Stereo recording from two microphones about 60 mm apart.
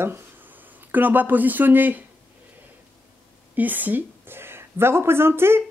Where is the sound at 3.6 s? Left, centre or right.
Right.